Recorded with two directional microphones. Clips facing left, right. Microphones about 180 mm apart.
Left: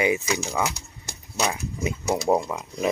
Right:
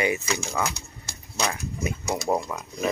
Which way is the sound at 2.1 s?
25° left (ahead or behind).